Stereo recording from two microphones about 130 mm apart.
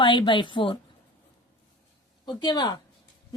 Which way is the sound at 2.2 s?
35° left (ahead or behind).